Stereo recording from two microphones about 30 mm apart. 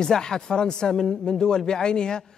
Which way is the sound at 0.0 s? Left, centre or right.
Left.